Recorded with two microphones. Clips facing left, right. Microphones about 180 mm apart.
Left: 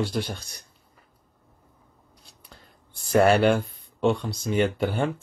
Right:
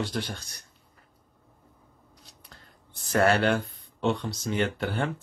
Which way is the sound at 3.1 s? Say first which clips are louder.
Left 4 dB; 10° left (ahead or behind).